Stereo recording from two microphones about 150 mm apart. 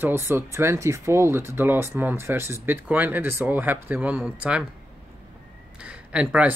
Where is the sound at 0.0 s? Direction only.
15° right (ahead or behind).